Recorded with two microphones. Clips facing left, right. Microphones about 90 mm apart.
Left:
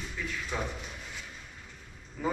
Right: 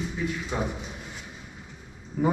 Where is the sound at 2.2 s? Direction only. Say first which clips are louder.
Right 7 dB; 25° right (ahead or behind).